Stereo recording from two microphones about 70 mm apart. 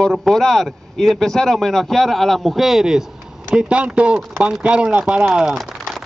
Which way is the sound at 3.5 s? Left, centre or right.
Centre.